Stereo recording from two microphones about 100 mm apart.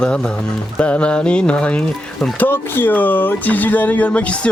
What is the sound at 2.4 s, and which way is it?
Speech, 20° left (ahead or behind).